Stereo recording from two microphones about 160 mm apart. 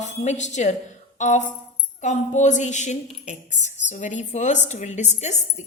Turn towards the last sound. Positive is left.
turn(degrees=45)  # may be behind; listen again after turning